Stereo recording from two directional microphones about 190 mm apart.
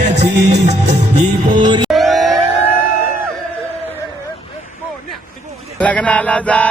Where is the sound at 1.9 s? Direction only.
Centre (ahead or behind).